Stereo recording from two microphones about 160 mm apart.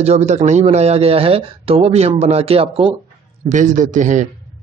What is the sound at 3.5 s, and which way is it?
Speech, 50° right (ahead or behind).